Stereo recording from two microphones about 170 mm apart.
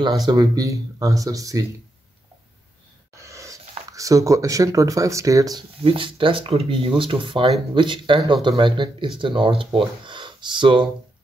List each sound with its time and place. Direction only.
0.3 s speech: 20° right (ahead or behind)
3.2 s a sound: 20° right (ahead or behind)
3.9 s speech: 20° right (ahead or behind)